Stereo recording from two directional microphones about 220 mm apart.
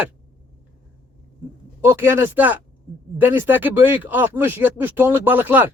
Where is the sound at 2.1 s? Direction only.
10° right (ahead or behind).